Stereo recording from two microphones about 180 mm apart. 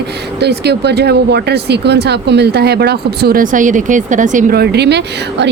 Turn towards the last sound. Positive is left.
turn(degrees=-70)  # may be behind; listen again after turning